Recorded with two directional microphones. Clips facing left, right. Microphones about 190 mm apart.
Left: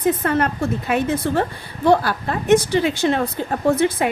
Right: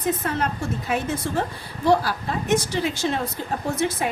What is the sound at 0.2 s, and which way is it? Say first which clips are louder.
A woman's voice: left 6 dB; 60° left (ahead or behind).